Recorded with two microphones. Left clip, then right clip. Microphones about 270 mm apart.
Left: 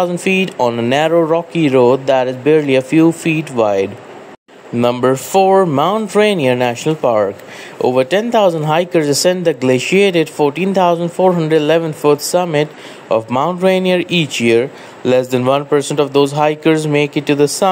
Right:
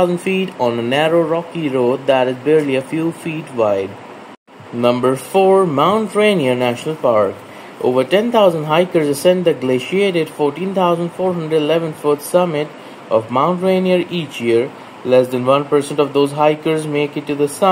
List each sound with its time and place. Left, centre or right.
0.0 s speech: left
4.8 s speech: left